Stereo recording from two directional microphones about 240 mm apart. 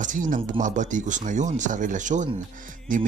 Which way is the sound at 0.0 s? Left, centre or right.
Right.